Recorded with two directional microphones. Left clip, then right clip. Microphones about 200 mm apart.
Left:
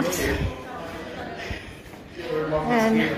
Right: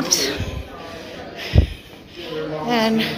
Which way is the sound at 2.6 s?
10° right (ahead or behind).